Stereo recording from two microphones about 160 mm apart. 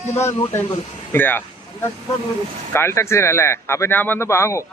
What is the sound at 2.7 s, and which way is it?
A man's voice, 15° left (ahead or behind).